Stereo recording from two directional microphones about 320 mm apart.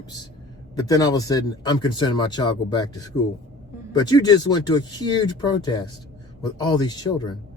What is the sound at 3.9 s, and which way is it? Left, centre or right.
Speech, centre.